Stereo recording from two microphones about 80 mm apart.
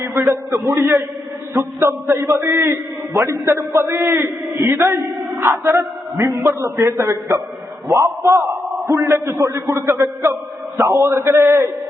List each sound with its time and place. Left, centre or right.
0.0 s a man's voice: right